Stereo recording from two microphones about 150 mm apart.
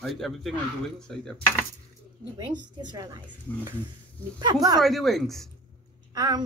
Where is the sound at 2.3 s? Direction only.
30° right (ahead or behind).